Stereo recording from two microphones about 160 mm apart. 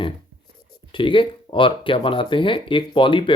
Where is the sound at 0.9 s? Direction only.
30° left (ahead or behind).